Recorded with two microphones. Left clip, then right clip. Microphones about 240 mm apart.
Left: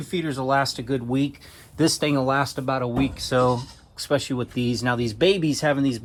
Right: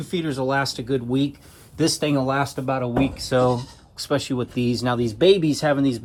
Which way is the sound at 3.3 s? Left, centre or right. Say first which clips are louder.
Right 1 dB; left.